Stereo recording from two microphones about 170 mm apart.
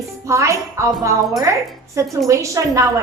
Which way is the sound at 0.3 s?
15° right (ahead or behind).